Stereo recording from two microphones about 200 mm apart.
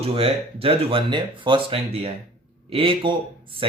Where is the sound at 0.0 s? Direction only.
30° right (ahead or behind).